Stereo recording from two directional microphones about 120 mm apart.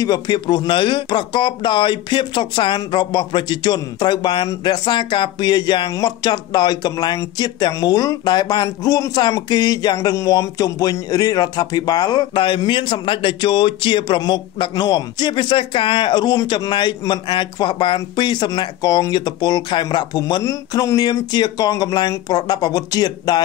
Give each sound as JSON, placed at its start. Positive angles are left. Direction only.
{"t": 0.0, "sound": "speech", "side_deg": 35}